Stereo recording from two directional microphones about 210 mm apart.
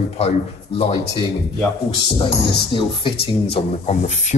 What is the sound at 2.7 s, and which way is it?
Speech, 25° left (ahead or behind).